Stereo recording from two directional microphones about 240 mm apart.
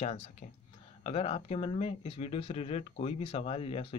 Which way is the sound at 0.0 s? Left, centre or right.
Left.